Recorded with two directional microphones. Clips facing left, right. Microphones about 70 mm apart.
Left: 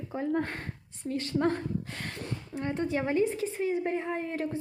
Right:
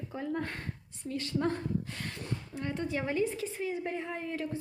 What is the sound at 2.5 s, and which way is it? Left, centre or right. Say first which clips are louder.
A woman's voice: left 5 dB; left.